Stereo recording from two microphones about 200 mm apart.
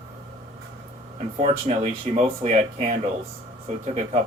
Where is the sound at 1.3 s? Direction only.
30° right (ahead or behind).